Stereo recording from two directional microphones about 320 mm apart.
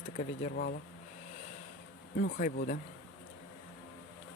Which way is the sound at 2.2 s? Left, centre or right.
Left.